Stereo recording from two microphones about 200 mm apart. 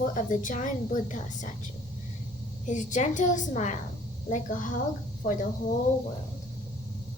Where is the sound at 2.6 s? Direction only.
40° left (ahead or behind).